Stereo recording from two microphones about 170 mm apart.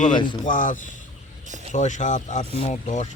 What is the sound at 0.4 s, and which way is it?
Speech, 50° left (ahead or behind).